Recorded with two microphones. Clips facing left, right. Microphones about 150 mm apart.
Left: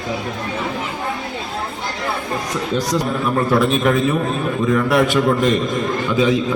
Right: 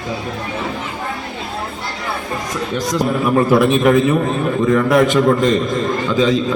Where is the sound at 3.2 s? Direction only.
10° right (ahead or behind).